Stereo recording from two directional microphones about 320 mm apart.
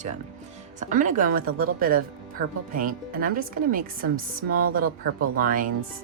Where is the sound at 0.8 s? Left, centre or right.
Right.